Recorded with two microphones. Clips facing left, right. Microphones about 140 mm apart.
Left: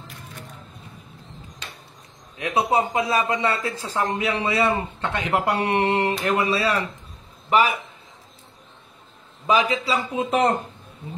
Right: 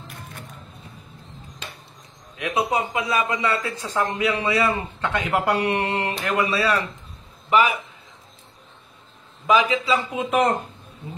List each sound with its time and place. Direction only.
2.3 s a man's voice: 35° left (ahead or behind)
9.5 s a man's voice: 35° left (ahead or behind)